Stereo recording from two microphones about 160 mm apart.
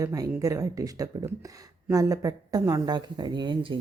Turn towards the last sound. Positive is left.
turn(degrees=-30)  # may be behind; listen again after turning